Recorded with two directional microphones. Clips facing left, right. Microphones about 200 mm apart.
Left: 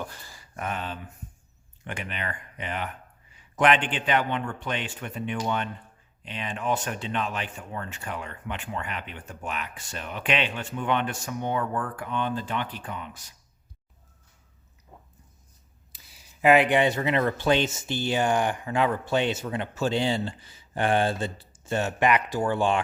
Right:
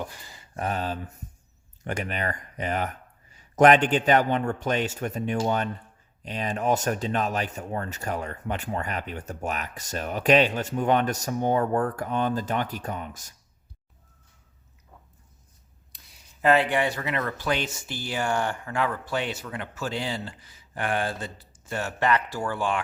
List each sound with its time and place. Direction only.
0.0 s a sound: 15° right (ahead or behind)
0.5 s speech: 35° right (ahead or behind)
15.9 s speech: centre (ahead or behind); by 22.8 s 25° left (ahead or behind)